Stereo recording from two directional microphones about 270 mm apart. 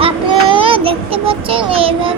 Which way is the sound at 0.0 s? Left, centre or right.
Centre.